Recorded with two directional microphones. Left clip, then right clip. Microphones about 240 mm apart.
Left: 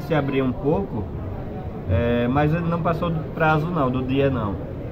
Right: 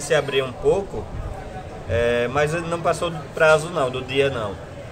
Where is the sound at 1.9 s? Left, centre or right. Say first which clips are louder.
Right 2 dB; right.